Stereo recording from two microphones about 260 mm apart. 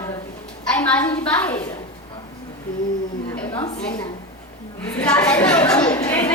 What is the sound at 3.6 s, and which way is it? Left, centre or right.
Speech, centre.